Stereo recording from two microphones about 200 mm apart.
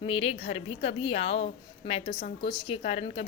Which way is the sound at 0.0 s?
25° left (ahead or behind).